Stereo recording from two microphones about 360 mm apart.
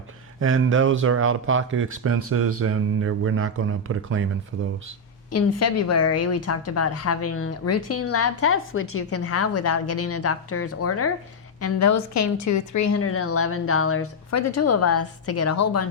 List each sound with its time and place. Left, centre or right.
0.3 s speech: right
5.3 s a woman's voice: left